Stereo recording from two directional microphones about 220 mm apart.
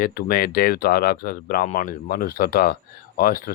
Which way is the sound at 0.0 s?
40° left (ahead or behind).